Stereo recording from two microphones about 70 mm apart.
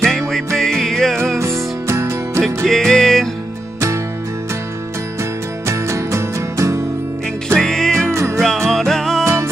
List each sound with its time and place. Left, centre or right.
0.0 s music: centre
1.9 s music: right
2.4 s music: centre
5.7 s music: right
7.5 s music: centre
8.1 s music: right
8.4 s music: centre
9.2 s music: right